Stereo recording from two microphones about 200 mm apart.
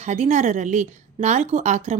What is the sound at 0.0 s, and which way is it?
A woman's voice, 35° right (ahead or behind).